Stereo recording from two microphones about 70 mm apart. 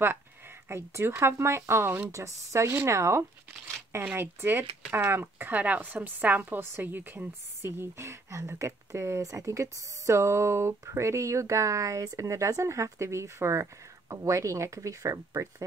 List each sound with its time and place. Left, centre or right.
0.0 s speech: right
2.1 s a woman's voice: right
5.5 s a woman's voice: right